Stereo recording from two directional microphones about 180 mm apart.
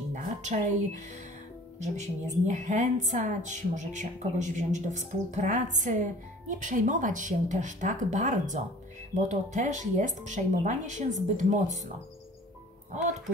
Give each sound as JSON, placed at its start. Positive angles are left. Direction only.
{"t": 0.1, "sound": "music", "side_deg": -40}
{"t": 1.8, "sound": "speech", "side_deg": -40}